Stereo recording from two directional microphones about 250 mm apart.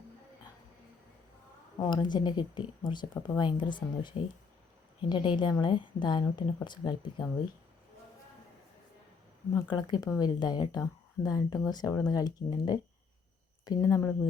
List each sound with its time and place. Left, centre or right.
1.8 s a woman's voice: centre
9.6 s a woman's voice: centre